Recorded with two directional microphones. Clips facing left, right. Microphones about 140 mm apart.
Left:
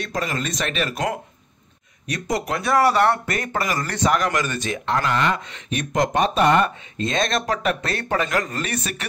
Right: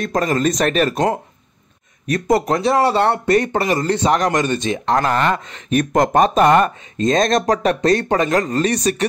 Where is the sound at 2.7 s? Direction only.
25° right (ahead or behind).